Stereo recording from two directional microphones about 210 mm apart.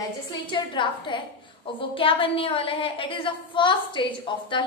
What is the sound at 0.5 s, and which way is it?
A woman's voice, 20° left (ahead or behind).